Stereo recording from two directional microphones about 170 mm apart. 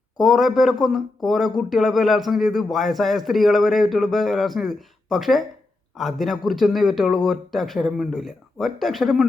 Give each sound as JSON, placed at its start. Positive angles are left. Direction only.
{"t": 0.2, "sound": "speech", "side_deg": 0}